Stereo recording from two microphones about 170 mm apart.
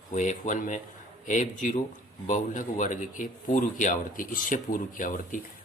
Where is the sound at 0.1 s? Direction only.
45° left (ahead or behind).